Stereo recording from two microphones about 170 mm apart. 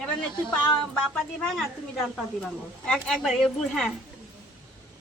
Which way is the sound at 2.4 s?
5° left (ahead or behind).